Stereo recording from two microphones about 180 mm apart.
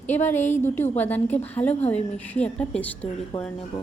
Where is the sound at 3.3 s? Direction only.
30° left (ahead or behind).